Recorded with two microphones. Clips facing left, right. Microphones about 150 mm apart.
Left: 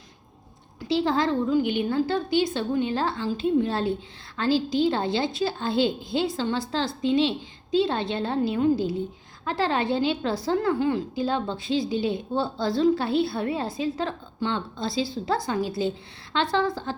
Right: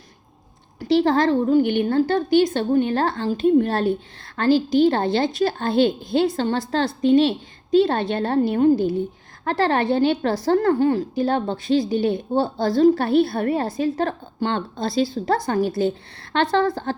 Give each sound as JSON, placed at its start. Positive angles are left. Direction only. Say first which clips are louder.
{"t": 0.9, "sound": "a woman's voice", "louder": "right 6 dB", "side_deg": -60}
{"t": 9.4, "sound": "a woman's voice", "louder": "right 5 dB", "side_deg": -60}